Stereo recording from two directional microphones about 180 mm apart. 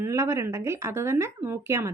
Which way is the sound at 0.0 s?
15° right (ahead or behind).